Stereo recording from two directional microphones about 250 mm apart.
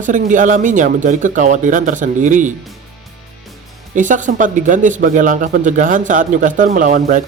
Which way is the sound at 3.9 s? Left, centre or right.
Right.